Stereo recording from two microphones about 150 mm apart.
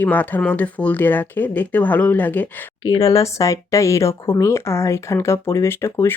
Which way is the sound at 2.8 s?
25° left (ahead or behind).